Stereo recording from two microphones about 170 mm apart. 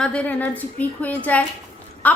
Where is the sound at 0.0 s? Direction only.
5° left (ahead or behind).